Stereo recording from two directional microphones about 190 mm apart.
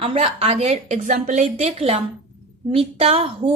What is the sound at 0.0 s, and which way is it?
A woman's voice, 30° right (ahead or behind).